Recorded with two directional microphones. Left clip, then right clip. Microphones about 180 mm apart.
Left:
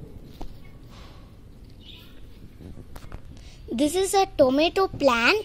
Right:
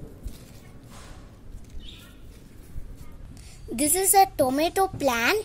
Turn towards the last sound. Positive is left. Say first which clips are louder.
# left 3 dB
turn(degrees=20)  # may be behind; listen again after turning